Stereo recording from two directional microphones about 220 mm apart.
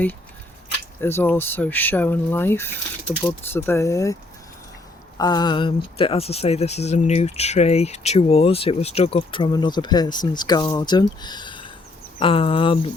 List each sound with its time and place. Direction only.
1.0 s speech: 10° left (ahead or behind)